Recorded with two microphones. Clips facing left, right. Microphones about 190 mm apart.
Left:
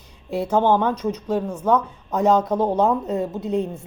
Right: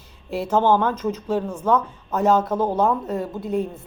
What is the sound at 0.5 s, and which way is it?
Speech, 15° left (ahead or behind).